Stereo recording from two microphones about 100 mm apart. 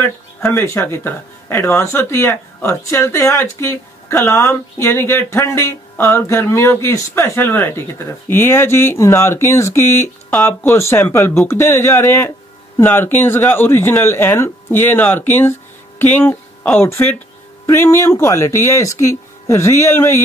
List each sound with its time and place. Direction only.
0.0 s speech: 25° left (ahead or behind)